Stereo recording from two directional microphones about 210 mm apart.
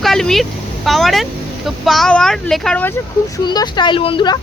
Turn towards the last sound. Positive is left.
turn(degrees=20)  # may be behind; listen again after turning